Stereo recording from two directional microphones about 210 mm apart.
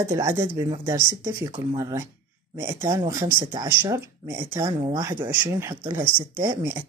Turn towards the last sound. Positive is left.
turn(degrees=-15)  # may be behind; listen again after turning